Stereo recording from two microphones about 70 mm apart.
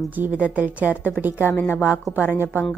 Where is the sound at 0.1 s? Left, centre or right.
Right.